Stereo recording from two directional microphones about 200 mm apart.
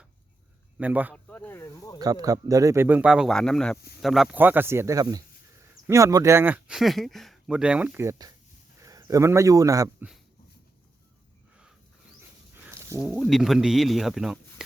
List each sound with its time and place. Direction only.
0.8 s speech: 10° right (ahead or behind)
1.1 s snake: 10° left (ahead or behind)
2.0 s speech: 20° right (ahead or behind)
12.6 s a sound: 15° right (ahead or behind)
13.0 s speech: centre (ahead or behind)